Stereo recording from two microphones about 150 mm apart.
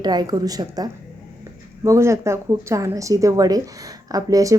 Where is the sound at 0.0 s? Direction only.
25° right (ahead or behind).